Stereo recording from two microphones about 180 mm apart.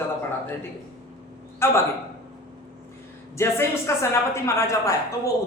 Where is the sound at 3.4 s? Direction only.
15° left (ahead or behind).